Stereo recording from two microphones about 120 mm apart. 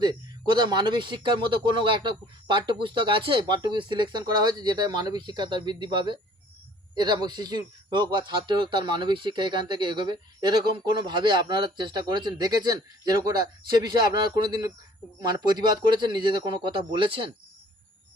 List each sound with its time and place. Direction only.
0.0 s speech: 35° right (ahead or behind)